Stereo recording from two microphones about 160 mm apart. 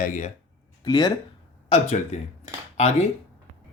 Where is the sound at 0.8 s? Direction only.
25° left (ahead or behind).